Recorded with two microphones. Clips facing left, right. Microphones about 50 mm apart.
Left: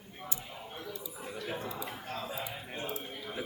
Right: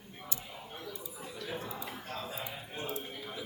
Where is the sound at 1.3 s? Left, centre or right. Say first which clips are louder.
Left 2 dB; centre.